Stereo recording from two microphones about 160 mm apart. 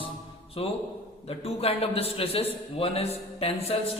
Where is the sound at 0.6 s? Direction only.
35° left (ahead or behind).